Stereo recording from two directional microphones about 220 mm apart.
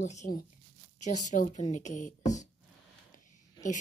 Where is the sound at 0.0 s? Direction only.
30° left (ahead or behind).